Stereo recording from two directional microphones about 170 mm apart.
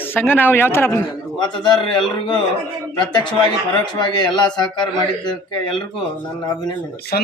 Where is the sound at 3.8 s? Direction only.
25° left (ahead or behind).